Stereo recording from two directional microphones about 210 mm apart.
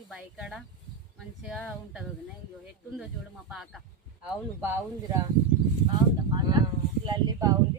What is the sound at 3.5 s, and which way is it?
Speech, centre (ahead or behind).